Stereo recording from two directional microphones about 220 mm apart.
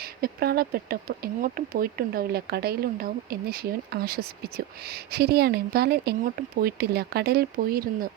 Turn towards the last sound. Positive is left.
turn(degrees=-40)  # may be behind; listen again after turning